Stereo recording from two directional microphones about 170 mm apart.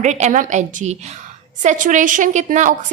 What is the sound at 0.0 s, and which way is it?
A woman's voice, 45° right (ahead or behind).